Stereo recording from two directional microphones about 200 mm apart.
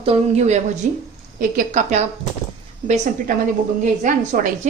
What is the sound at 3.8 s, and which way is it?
Speech, 40° right (ahead or behind).